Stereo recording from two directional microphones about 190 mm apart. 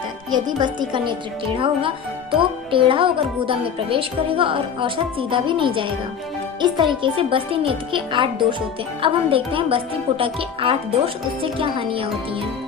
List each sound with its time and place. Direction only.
0.3 s speech: 25° right (ahead or behind)